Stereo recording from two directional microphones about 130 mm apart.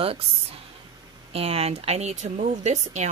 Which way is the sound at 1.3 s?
50° right (ahead or behind).